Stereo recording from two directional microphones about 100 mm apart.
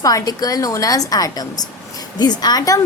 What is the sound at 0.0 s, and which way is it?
A woman's voice, 35° left (ahead or behind).